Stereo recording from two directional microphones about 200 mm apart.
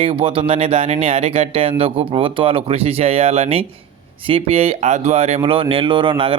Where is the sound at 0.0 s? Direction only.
30° right (ahead or behind).